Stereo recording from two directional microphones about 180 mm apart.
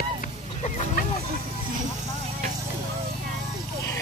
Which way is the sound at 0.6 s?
40° left (ahead or behind).